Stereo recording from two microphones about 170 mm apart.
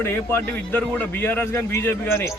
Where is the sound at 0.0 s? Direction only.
15° left (ahead or behind).